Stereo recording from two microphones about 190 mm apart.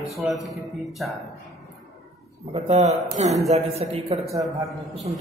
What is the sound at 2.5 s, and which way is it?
A man's voice, 30° right (ahead or behind).